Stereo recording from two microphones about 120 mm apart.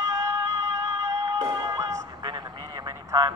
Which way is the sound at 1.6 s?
25° right (ahead or behind).